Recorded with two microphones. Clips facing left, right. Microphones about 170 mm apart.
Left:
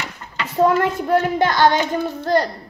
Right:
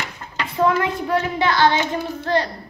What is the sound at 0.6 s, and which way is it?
A woman's voice, 45° left (ahead or behind).